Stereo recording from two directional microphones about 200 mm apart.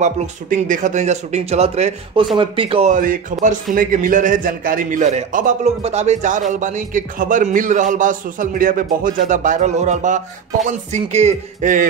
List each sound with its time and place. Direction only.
0.0 s a man's voice: 40° right (ahead or behind)